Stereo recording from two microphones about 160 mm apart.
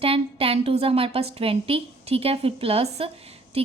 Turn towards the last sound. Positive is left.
turn(degrees=-35)  # may be behind; listen again after turning